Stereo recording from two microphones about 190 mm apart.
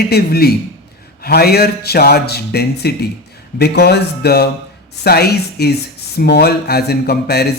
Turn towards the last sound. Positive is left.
turn(degrees=55)  # may be behind; listen again after turning